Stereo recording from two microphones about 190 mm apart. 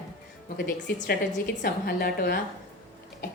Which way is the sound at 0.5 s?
50° left (ahead or behind).